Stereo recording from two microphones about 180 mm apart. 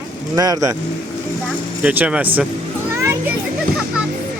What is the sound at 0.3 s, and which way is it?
Speech, 20° right (ahead or behind).